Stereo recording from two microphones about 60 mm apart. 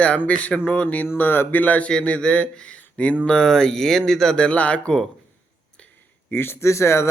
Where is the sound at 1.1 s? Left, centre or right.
Left.